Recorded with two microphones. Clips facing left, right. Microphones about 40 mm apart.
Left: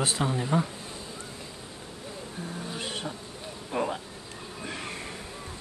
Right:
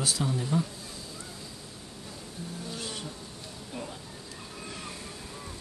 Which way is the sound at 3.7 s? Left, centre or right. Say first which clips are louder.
Left 11 dB; left.